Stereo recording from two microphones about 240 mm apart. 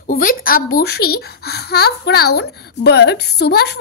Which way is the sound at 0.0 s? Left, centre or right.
Left.